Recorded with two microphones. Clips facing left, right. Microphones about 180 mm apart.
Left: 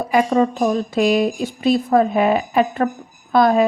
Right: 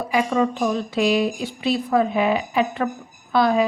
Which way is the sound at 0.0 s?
45° left (ahead or behind).